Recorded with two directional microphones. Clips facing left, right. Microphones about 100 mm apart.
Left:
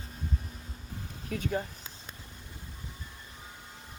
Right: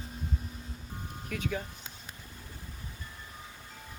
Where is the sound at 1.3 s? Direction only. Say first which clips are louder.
Left 3 dB; 35° left (ahead or behind).